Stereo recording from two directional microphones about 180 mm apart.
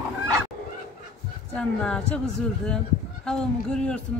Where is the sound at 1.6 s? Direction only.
5° left (ahead or behind).